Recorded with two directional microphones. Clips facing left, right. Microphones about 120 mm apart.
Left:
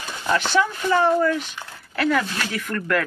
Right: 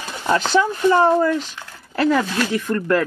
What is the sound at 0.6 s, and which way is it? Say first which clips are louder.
Speech: right 5 dB; 30° right (ahead or behind).